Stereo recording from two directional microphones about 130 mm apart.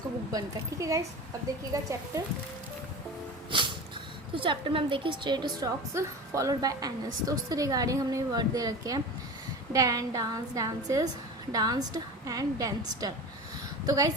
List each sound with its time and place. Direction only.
0.3 s a woman's voice: 25° right (ahead or behind)
4.4 s a woman's voice: 40° right (ahead or behind)